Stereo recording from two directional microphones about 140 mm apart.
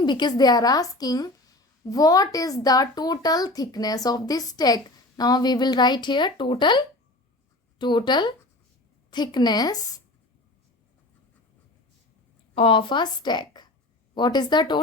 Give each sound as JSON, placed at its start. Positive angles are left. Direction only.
{"t": 0.0, "sound": "a woman's voice", "side_deg": 35}
{"t": 12.5, "sound": "a woman's voice", "side_deg": 40}